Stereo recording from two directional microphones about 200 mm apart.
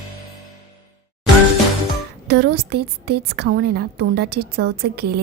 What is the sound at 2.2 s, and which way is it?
A woman's voice, 55° right (ahead or behind).